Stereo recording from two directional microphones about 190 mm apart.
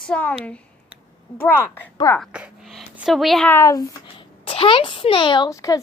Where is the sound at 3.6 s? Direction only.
20° left (ahead or behind).